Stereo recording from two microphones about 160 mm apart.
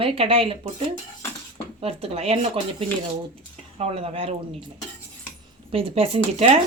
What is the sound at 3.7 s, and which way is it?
Speech, 40° right (ahead or behind).